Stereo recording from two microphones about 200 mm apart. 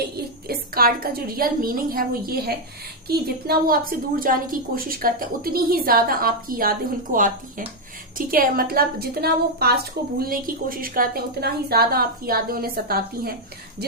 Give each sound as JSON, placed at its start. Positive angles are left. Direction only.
{"t": 0.4, "sound": "a woman's voice", "side_deg": -50}
{"t": 8.3, "sound": "a woman's voice", "side_deg": -45}